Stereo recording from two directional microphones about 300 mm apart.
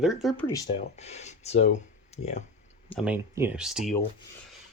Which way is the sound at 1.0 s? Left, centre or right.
Left.